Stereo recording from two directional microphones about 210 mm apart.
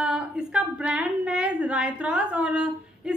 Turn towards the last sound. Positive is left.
turn(degrees=-5)  # may be behind; listen again after turning